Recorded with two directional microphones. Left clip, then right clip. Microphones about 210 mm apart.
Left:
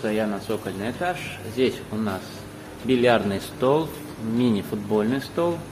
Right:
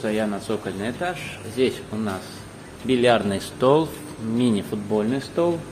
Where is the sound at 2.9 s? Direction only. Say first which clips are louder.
Right 1 dB; 10° right (ahead or behind).